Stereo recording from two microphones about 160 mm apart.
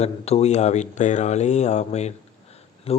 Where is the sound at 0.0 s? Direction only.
40° left (ahead or behind).